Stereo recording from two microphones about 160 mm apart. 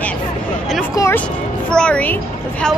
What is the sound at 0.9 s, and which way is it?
Speech, 20° left (ahead or behind).